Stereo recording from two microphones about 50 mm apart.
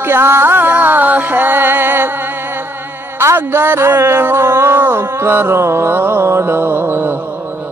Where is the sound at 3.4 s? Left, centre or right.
Right.